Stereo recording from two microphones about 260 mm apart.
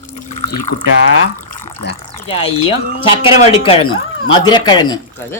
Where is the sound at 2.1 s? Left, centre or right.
Left.